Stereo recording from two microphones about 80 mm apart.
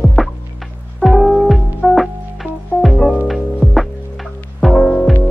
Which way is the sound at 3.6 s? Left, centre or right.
Right.